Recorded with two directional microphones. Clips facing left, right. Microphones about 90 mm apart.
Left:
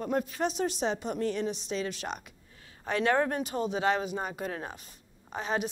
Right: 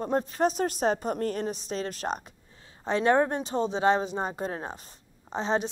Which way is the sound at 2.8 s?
25° right (ahead or behind).